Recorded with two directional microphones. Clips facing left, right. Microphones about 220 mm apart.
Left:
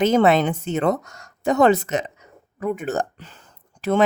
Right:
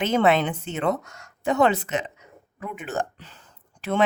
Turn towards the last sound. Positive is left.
turn(degrees=40)  # may be behind; listen again after turning